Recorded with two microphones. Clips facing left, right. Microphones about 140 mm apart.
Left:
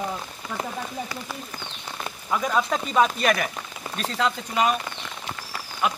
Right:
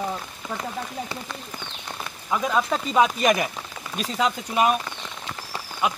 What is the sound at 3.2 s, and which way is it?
Speech, 15° right (ahead or behind).